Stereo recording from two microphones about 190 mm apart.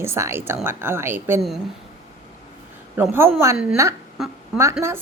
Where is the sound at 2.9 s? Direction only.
10° right (ahead or behind).